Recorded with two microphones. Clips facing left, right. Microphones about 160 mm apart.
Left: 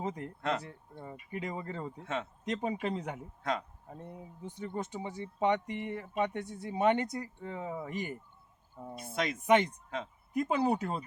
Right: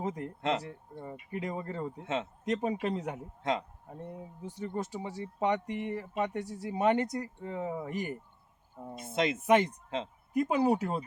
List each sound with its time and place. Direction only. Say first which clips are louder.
0.0 s speech: right 2 dB; centre (ahead or behind)
2.0 s speech: right 3 dB; 20° right (ahead or behind)
2.4 s speech: right 3 dB; centre (ahead or behind)
3.4 s speech: right 3 dB; 20° right (ahead or behind)
3.8 s speech: right 3 dB; centre (ahead or behind)
9.0 s speech: right 4 dB; 25° right (ahead or behind)
10.3 s speech: right 3 dB; 5° right (ahead or behind)